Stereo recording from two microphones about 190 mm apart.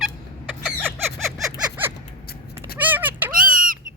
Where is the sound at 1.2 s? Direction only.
5° right (ahead or behind).